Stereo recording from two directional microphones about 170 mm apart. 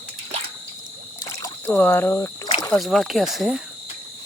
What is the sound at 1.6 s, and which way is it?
Speech, 10° left (ahead or behind).